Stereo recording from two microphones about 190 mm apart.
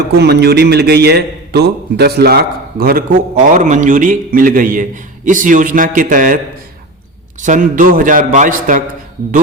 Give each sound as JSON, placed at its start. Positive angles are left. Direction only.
{"t": 0.2, "sound": "a man's voice", "side_deg": -60}
{"t": 7.4, "sound": "a man's voice", "side_deg": -40}